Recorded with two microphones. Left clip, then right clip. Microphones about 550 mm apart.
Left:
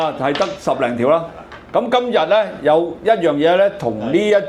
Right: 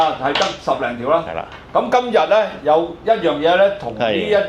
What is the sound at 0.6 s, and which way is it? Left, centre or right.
Speech, left.